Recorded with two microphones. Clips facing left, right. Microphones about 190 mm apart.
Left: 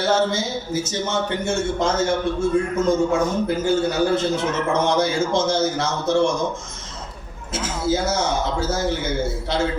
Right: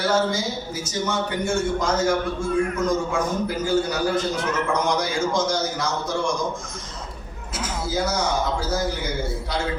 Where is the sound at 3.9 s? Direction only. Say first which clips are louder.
Left 4 dB; 25° left (ahead or behind).